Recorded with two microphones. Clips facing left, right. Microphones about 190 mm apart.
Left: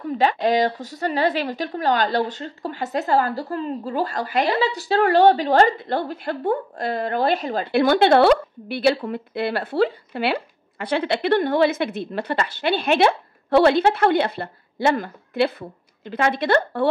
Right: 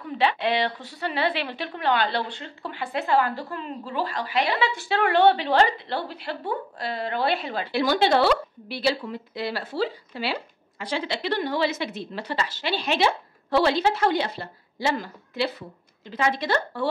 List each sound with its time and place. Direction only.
0.0 s a woman's voice: 45° left (ahead or behind); by 16.8 s 60° left (ahead or behind)